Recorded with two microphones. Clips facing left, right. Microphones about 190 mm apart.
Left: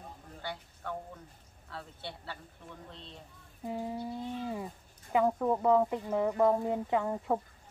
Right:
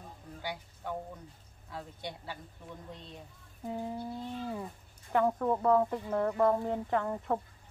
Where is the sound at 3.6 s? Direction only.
5° left (ahead or behind).